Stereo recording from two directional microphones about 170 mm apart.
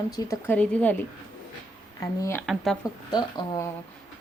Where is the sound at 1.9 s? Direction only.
15° left (ahead or behind).